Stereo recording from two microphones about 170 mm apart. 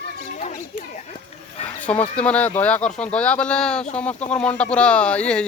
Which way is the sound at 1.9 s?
5° left (ahead or behind).